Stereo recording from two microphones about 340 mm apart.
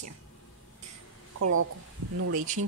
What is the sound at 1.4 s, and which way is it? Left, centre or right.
Speech, right.